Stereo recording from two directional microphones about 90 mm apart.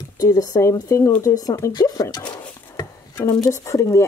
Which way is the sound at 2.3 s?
45° left (ahead or behind).